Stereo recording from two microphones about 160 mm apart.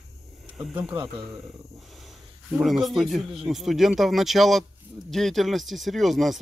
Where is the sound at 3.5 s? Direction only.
Centre (ahead or behind).